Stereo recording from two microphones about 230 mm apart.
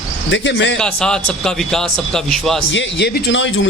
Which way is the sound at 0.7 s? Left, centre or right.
Centre.